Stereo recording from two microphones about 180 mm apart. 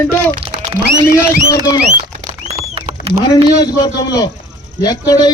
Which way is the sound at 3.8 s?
20° left (ahead or behind).